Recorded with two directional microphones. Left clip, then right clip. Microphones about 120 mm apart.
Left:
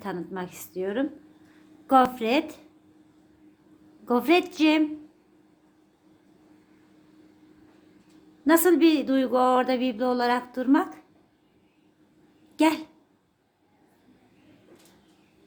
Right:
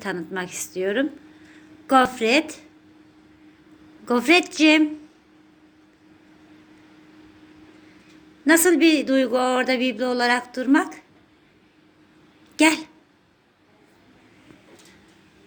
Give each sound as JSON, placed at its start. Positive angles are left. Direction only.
{"t": 0.0, "sound": "a woman's voice", "side_deg": 15}
{"t": 1.9, "sound": "speech", "side_deg": 25}
{"t": 4.0, "sound": "speech", "side_deg": 25}
{"t": 8.4, "sound": "speech", "side_deg": 25}
{"t": 12.5, "sound": "a woman's voice", "side_deg": 20}